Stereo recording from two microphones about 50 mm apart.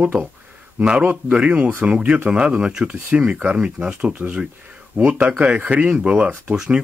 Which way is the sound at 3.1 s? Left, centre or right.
Right.